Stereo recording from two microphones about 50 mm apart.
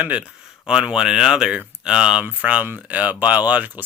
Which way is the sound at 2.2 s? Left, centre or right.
Right.